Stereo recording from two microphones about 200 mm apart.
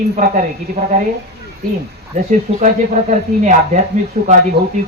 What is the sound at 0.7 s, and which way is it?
Speech, 35° right (ahead or behind).